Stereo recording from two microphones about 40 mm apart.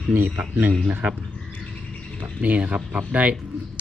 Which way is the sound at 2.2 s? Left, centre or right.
Right.